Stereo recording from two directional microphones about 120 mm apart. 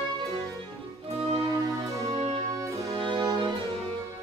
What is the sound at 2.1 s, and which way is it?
Music, 60° right (ahead or behind).